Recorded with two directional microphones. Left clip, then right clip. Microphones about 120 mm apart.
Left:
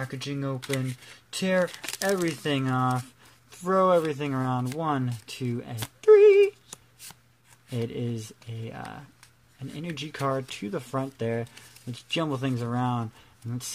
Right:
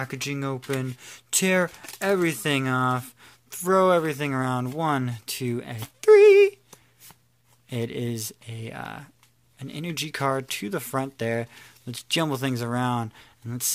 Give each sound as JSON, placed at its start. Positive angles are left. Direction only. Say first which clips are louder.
{"t": 0.0, "sound": "speech", "louder": "right 3 dB", "side_deg": -55}
{"t": 3.4, "sound": "speech", "louder": "right 2 dB", "side_deg": -25}
{"t": 5.9, "sound": "a sound", "louder": "right 2 dB", "side_deg": -25}
{"t": 7.7, "sound": "speech", "louder": "right 2 dB", "side_deg": -25}